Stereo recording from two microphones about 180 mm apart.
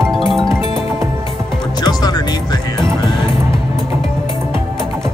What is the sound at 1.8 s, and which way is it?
Music, 20° left (ahead or behind).